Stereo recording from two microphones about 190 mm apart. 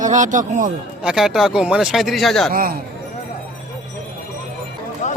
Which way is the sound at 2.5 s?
50° right (ahead or behind).